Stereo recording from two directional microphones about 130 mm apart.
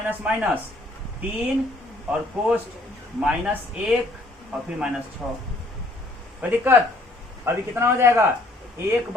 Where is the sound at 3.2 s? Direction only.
5° right (ahead or behind).